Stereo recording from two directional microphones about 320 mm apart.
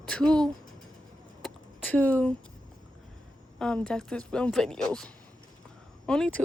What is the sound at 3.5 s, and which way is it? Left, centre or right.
Speech, centre.